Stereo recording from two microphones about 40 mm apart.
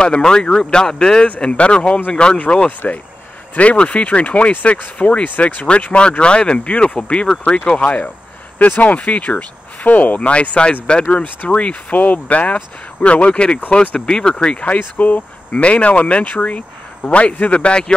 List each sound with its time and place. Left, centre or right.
0.0 s speech: left
8.5 s speech: left
8.8 s speech: left
13.3 s speech: left
14.8 s speech: left
15.5 s speech: left